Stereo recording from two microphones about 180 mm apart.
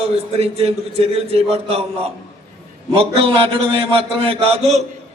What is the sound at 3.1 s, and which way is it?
A man's voice, 30° right (ahead or behind).